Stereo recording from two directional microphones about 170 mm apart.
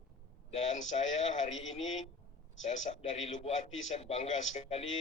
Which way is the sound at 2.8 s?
40° left (ahead or behind).